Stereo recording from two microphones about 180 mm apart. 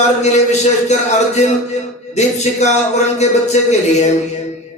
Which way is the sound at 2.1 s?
40° left (ahead or behind).